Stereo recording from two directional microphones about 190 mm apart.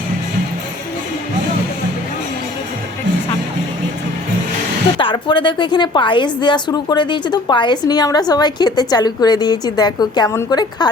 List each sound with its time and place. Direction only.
4.9 s a woman's voice: 25° left (ahead or behind)